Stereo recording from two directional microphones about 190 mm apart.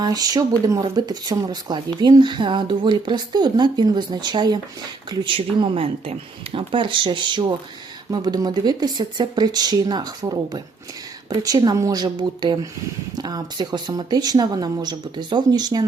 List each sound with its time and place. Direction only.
0.0 s speech: 20° right (ahead or behind)